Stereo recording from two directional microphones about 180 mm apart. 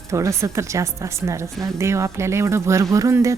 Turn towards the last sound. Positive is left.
turn(degrees=-15)  # may be behind; listen again after turning